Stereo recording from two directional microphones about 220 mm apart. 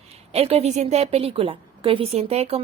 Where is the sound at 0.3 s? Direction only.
25° right (ahead or behind).